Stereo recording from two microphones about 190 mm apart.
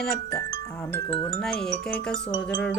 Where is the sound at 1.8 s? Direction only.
5° left (ahead or behind).